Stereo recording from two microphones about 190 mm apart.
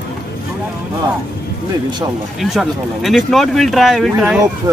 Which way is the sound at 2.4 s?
Centre (ahead or behind).